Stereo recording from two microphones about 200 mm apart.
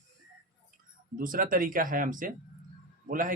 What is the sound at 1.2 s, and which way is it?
Speech, 45° right (ahead or behind).